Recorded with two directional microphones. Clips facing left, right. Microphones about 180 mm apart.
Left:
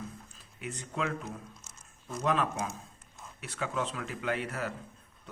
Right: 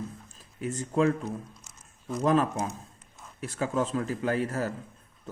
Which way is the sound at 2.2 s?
40° right (ahead or behind).